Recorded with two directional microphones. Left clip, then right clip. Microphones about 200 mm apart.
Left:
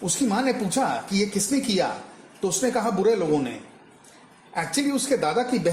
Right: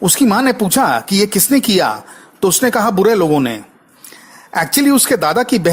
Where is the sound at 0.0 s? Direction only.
40° right (ahead or behind).